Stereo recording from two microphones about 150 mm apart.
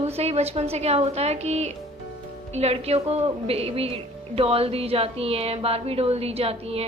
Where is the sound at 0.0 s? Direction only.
45° right (ahead or behind).